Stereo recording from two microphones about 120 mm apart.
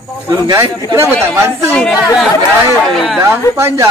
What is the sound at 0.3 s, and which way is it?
Speech, 25° right (ahead or behind).